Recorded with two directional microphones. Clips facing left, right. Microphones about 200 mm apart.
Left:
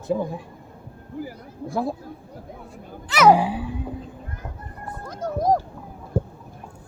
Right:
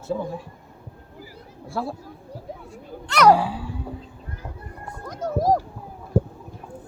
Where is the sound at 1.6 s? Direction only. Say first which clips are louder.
Left 4 dB; 15° left (ahead or behind).